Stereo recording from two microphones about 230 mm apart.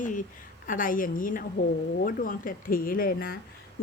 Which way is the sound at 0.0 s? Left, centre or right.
Left.